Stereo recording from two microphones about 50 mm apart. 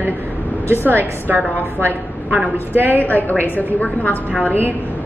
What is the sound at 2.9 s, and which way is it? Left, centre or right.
Speech, left.